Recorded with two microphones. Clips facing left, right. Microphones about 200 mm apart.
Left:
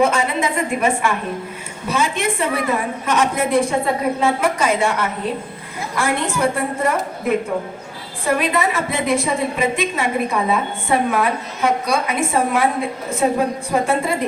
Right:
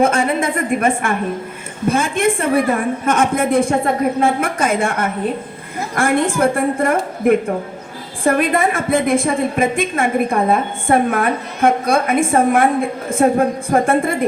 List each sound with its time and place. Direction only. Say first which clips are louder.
0.0 s a woman's voice: right 2 dB; 50° right (ahead or behind)